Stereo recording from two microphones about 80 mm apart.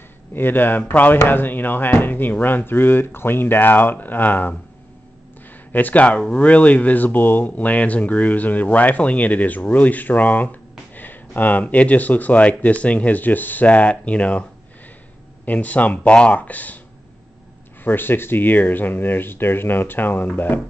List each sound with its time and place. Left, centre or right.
0.3 s speech: left
5.7 s speech: left
15.4 s speech: centre
17.8 s speech: left